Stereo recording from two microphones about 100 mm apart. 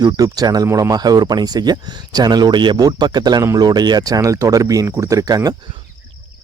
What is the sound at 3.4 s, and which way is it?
Speech, 40° right (ahead or behind).